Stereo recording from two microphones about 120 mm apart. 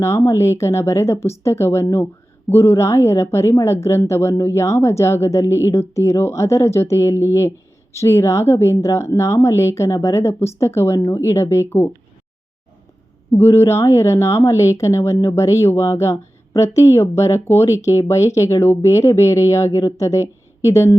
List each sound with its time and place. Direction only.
0.0 s a woman's voice: 25° left (ahead or behind)
13.4 s a woman's voice: 25° left (ahead or behind)